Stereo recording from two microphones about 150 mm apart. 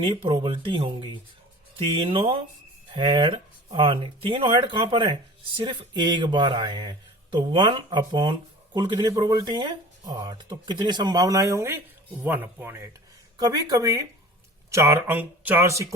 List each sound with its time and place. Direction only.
0.0 s speech: 35° right (ahead or behind); by 12.9 s 15° right (ahead or behind)
13.4 s speech: 25° right (ahead or behind)